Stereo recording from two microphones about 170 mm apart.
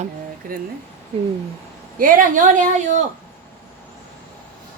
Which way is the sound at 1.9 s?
50° right (ahead or behind).